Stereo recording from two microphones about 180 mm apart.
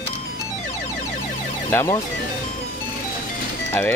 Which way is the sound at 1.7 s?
15° left (ahead or behind).